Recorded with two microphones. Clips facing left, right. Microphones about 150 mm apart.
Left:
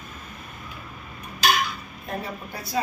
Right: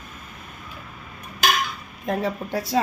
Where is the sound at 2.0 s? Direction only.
90° right.